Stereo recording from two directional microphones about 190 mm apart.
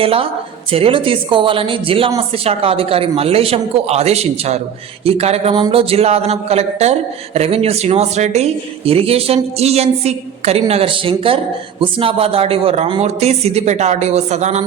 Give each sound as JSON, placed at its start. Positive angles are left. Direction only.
{"t": 0.0, "sound": "a woman's voice", "side_deg": -30}